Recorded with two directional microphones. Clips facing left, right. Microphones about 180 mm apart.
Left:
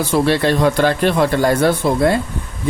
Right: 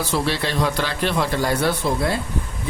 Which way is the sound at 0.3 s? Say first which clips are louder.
Left 8 dB; 50° left (ahead or behind).